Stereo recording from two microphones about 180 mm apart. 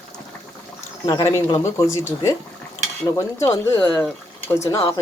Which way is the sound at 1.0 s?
20° left (ahead or behind).